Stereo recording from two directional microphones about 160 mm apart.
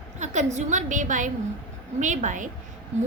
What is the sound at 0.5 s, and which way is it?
A woman's voice, 50° right (ahead or behind).